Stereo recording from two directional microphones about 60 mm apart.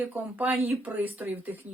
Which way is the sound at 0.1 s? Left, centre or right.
Right.